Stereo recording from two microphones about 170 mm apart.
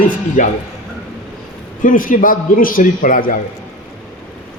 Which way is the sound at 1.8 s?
55° left (ahead or behind).